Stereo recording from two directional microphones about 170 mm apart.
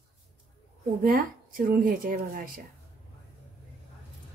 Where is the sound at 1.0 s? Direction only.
55° right (ahead or behind).